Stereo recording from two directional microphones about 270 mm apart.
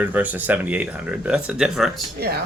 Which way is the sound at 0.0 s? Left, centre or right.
Centre.